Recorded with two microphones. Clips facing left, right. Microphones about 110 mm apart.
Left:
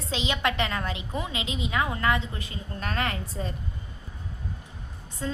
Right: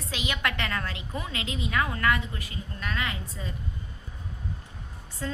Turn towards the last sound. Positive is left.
turn(degrees=20)  # may be behind; listen again after turning